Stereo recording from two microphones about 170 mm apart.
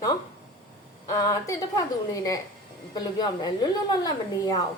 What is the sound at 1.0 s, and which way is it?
A woman's voice, 20° left (ahead or behind).